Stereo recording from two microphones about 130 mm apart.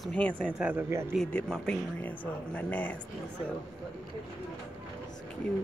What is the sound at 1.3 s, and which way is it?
Speech, 10° left (ahead or behind).